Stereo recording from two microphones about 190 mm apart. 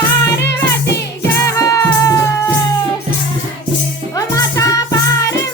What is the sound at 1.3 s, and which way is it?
Music, 15° left (ahead or behind).